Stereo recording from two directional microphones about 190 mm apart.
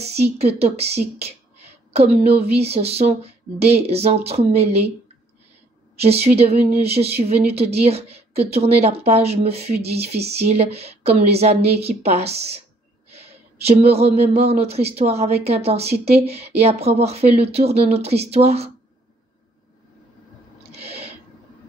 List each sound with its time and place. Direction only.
0.6 s a woman's voice: 35° right (ahead or behind)
5.9 s a woman's voice: 35° right (ahead or behind)